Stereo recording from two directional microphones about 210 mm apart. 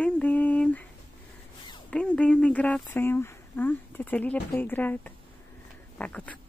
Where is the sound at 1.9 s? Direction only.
5° left (ahead or behind).